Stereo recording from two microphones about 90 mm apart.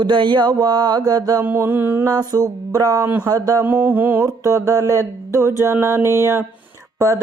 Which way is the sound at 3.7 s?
20° right (ahead or behind).